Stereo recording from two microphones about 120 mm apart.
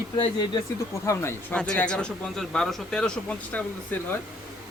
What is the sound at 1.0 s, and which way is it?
Speech, 20° left (ahead or behind).